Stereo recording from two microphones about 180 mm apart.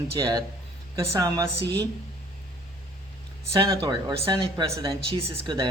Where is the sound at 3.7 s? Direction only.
25° right (ahead or behind).